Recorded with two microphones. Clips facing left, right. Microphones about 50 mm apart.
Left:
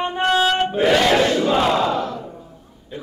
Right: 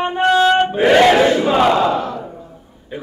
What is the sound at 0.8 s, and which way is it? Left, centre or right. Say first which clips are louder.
Battle cry: right 6 dB; right.